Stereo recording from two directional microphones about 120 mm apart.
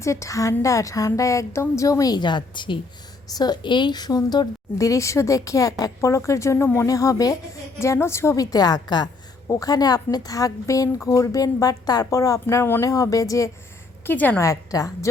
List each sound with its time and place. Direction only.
0.0 s a woman's voice: 25° left (ahead or behind)
14.0 s a woman's voice: 15° left (ahead or behind)
14.4 s a woman's voice: 30° left (ahead or behind)